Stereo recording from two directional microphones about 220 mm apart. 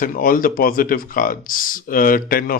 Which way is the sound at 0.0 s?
40° left (ahead or behind).